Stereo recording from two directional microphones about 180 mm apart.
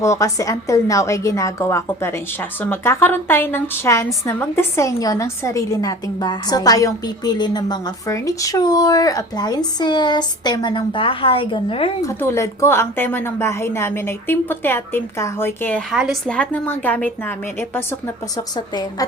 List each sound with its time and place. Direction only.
0.0 s a woman's voice: 20° left (ahead or behind)
12.0 s a woman's voice: 15° left (ahead or behind)
15.9 s a woman's voice: centre (ahead or behind)
18.3 s a woman's voice: 20° left (ahead or behind)